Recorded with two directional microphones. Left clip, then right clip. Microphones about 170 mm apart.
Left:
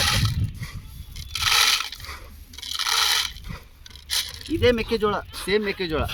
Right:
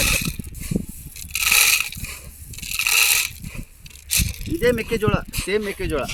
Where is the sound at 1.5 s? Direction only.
15° right (ahead or behind).